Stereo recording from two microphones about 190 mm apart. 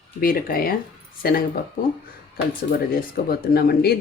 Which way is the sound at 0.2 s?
50° left (ahead or behind).